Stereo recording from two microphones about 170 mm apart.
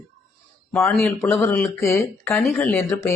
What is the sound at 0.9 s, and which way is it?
Speech, centre (ahead or behind).